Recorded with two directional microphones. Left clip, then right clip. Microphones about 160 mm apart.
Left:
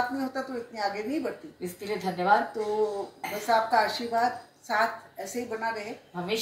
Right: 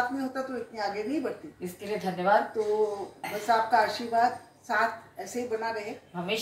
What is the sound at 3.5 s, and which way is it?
Speech, 10° left (ahead or behind).